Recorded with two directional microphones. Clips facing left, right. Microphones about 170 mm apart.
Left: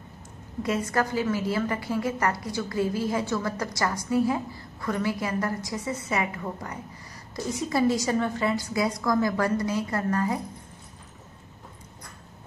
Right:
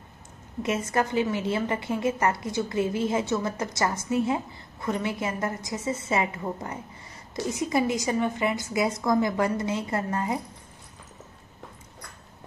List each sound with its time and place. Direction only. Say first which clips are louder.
0.6 s a woman's voice: even; 20° right (ahead or behind)